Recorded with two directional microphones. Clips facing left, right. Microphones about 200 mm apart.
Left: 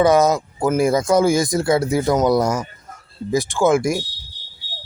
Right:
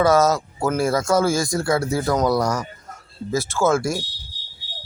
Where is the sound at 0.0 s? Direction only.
20° left (ahead or behind).